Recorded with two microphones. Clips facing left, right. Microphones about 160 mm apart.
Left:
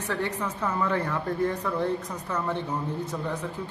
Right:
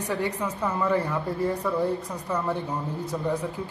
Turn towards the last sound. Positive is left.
turn(degrees=-10)  # may be behind; listen again after turning